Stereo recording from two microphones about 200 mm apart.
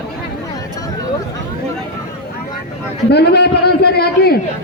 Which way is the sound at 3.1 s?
55° left (ahead or behind).